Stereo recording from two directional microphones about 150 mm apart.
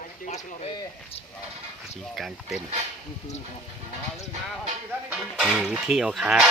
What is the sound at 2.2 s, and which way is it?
Speech, centre (ahead or behind).